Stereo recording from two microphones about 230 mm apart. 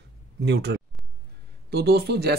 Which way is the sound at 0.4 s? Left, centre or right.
Right.